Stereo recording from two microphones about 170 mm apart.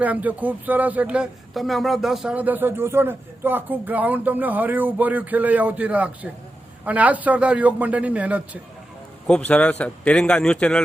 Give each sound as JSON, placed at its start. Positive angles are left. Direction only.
{"t": 0.0, "sound": "speech", "side_deg": -10}
{"t": 9.2, "sound": "a man's voice", "side_deg": 5}